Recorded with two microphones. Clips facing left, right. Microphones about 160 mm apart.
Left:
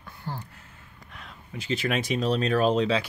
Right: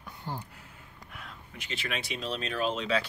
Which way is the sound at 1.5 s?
35° left (ahead or behind).